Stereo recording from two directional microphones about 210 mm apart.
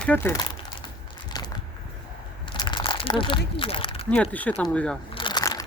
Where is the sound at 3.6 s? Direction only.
25° left (ahead or behind).